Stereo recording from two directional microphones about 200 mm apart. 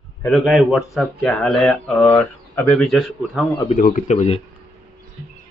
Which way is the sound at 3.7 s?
35° left (ahead or behind).